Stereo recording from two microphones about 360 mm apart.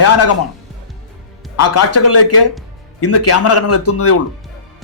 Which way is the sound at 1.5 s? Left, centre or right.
Left.